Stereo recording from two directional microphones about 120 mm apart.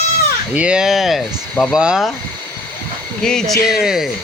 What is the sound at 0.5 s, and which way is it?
Speech, 10° right (ahead or behind).